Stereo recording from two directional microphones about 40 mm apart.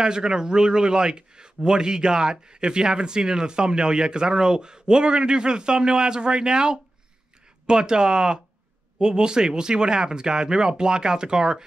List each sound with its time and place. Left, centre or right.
0.0 s a man's voice: centre